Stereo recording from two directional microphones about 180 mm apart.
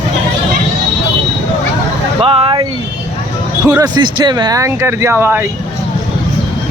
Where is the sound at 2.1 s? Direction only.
30° right (ahead or behind).